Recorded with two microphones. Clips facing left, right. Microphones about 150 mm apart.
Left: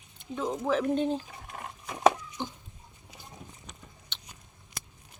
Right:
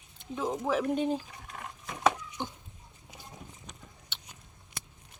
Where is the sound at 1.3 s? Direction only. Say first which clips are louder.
Left 2 dB; 25° left (ahead or behind).